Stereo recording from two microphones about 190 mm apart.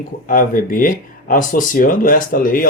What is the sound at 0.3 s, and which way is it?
Speech, 45° left (ahead or behind).